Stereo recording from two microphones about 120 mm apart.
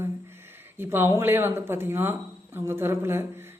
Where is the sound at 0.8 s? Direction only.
20° right (ahead or behind).